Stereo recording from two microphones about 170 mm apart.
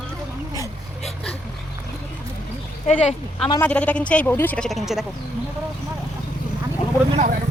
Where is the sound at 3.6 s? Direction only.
10° left (ahead or behind).